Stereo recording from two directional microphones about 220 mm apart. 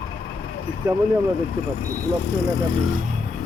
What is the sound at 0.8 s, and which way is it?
Speech, 10° right (ahead or behind).